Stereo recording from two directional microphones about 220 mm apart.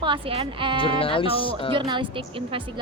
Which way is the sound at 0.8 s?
25° left (ahead or behind).